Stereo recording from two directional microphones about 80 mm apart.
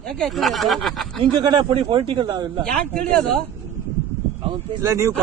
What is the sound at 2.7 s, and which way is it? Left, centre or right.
Speech, centre.